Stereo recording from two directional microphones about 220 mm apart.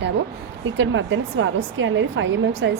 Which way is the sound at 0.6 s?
60° right (ahead or behind).